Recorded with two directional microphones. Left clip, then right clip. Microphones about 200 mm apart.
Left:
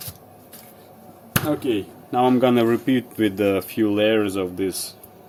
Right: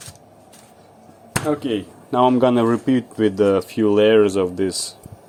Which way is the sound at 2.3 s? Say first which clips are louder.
Right 1 dB; 20° right (ahead or behind).